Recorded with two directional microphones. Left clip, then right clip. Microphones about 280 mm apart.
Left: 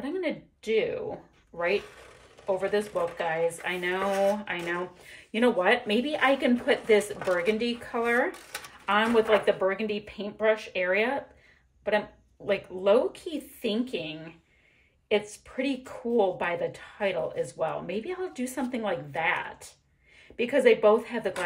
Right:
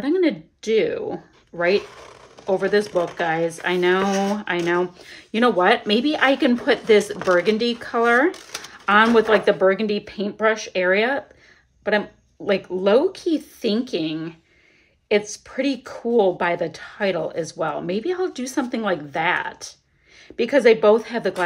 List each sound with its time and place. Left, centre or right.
0.0 s speech: centre
2.4 s speech: right
12.4 s speech: centre
20.3 s speech: centre